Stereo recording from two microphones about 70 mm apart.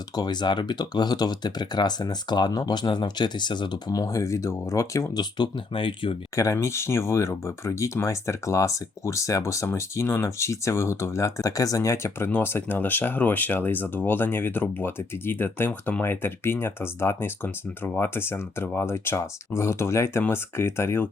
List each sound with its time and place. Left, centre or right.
0.2 s speech: left
6.3 s speech: left
12.3 s speech: left